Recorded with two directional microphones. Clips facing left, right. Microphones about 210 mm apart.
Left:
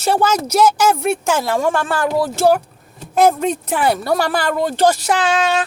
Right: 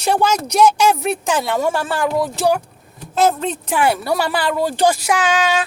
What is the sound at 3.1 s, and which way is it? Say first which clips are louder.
Speech: left 3 dB; 15° left (ahead or behind).